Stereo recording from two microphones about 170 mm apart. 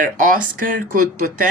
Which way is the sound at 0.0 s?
50° right (ahead or behind).